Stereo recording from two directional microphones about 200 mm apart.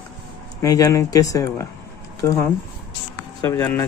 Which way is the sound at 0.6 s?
15° left (ahead or behind).